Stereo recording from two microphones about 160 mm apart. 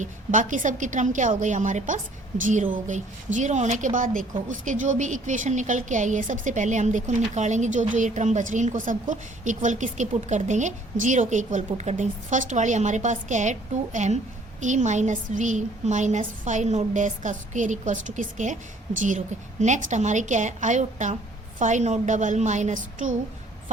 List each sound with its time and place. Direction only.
0.0 s a woman's voice: 55° right (ahead or behind)